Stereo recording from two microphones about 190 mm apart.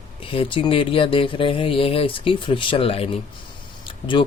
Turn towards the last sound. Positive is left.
turn(degrees=25)  # may be behind; listen again after turning